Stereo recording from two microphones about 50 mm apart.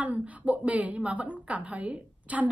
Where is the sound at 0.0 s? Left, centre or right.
Right.